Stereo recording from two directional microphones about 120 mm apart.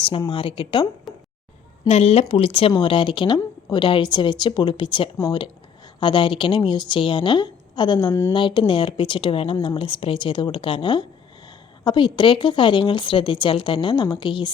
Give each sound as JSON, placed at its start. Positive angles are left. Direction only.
{"t": 0.3, "sound": "a woman's voice", "side_deg": 45}
{"t": 1.1, "sound": "a sound", "side_deg": 0}
{"t": 1.9, "sound": "a woman's voice", "side_deg": 60}